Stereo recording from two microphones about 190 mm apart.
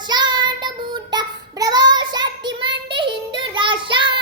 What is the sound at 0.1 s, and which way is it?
Child singing, 25° right (ahead or behind).